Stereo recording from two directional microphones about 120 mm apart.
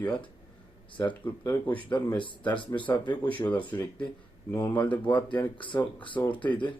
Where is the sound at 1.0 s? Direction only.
15° left (ahead or behind).